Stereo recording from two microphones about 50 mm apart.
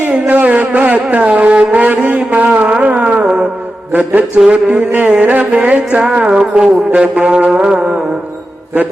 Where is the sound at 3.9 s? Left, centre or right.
Right.